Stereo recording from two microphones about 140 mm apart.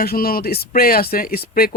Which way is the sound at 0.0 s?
90° left.